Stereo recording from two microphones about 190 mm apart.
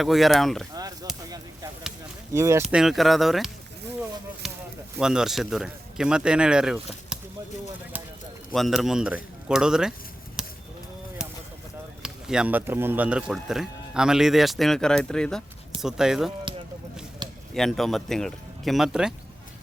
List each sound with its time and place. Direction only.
0.0 s speech: centre (ahead or behind)
0.7 s speech: 20° right (ahead or behind)
2.3 s speech: 15° right (ahead or behind)
2.6 s speech: 5° right (ahead or behind)
4.4 s a sound: centre (ahead or behind)
4.9 s speech: 5° right (ahead or behind)
8.5 s speech: centre (ahead or behind)
10.4 s cattle: centre (ahead or behind)
11.2 s a sound: 5° right (ahead or behind)
12.0 s speech: 5° right (ahead or behind)
17.5 s speech: centre (ahead or behind)